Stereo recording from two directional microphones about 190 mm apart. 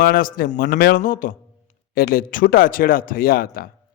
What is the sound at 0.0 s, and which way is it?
A man's voice, 50° left (ahead or behind).